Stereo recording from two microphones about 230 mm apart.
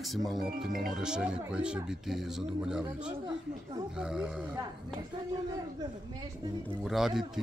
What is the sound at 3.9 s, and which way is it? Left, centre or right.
Speech, centre.